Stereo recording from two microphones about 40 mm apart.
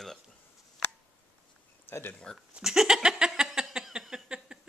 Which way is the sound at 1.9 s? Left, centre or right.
Left.